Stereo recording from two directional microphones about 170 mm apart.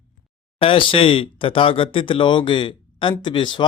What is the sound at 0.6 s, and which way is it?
Speech, 30° left (ahead or behind).